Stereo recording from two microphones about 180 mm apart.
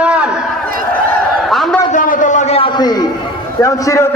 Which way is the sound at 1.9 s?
45° left (ahead or behind).